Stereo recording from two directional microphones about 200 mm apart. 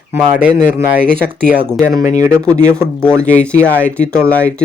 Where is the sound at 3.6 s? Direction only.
5° left (ahead or behind).